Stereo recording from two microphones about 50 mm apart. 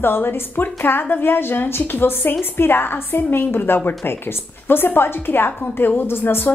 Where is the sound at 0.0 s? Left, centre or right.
Left.